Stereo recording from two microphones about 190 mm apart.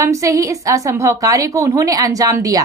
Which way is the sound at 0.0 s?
15° right (ahead or behind).